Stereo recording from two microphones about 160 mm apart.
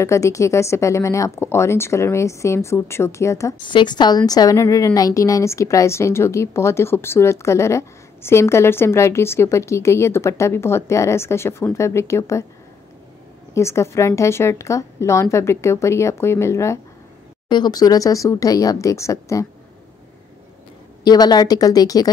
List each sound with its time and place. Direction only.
0.0 s a woman's voice: 20° left (ahead or behind)
3.6 s a woman's voice: 30° left (ahead or behind)
13.6 s a woman's voice: 15° left (ahead or behind)
21.0 s speech: 25° left (ahead or behind)